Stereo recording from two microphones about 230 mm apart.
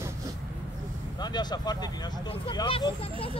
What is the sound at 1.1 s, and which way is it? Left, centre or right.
Speech, centre.